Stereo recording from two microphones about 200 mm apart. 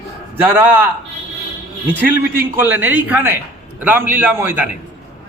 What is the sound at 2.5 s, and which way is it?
A man's voice, 10° right (ahead or behind).